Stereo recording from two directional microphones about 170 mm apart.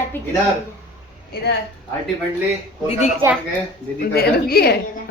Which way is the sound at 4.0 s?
65° left (ahead or behind).